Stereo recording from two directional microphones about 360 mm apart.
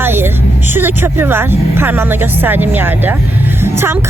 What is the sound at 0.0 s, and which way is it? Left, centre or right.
Vehicle, centre.